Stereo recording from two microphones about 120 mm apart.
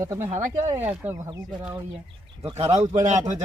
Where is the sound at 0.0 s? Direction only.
25° right (ahead or behind).